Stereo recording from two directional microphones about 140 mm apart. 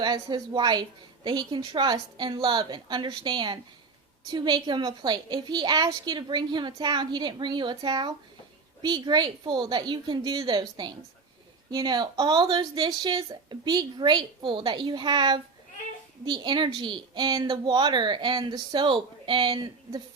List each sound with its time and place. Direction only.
0.0 s a woman's voice: 30° right (ahead or behind)